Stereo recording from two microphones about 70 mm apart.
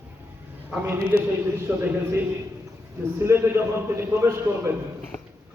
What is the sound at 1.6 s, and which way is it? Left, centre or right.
Speech, right.